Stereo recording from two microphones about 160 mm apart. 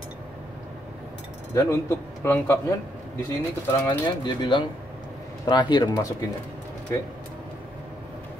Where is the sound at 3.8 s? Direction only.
30° left (ahead or behind).